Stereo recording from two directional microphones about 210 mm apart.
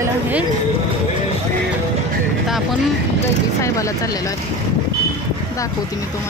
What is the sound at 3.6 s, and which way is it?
Speech, 15° left (ahead or behind).